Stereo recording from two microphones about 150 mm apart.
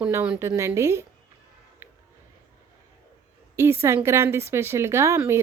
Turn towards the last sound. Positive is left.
turn(degrees=-15)  # may be behind; listen again after turning